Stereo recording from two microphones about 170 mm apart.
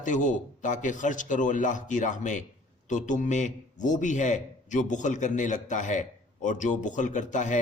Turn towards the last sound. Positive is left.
turn(degrees=45)  # may be behind; listen again after turning